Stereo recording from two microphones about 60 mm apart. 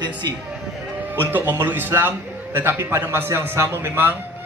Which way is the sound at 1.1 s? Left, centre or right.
Right.